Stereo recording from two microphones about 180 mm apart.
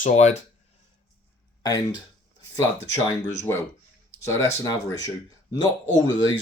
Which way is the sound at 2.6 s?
15° left (ahead or behind).